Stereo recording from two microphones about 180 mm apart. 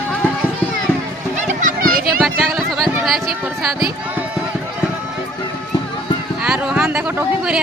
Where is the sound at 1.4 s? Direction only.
45° right (ahead or behind).